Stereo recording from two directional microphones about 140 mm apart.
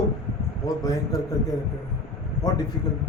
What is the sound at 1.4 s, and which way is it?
Speech, 25° left (ahead or behind).